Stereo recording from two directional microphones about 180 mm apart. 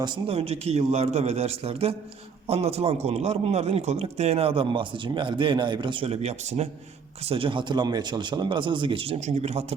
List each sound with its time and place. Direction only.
0.0 s speech: 30° right (ahead or behind)